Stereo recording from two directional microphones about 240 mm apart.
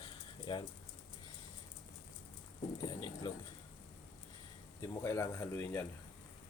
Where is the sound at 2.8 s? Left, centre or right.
Centre.